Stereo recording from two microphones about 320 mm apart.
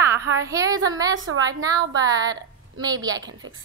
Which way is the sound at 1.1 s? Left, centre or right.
Right.